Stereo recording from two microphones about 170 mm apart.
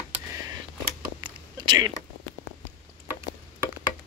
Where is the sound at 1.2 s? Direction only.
25° right (ahead or behind).